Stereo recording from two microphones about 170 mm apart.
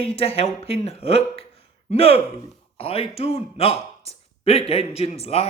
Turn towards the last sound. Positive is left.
turn(degrees=35)  # may be behind; listen again after turning